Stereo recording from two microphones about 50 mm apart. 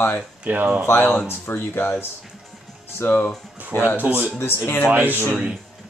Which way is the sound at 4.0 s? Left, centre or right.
Right.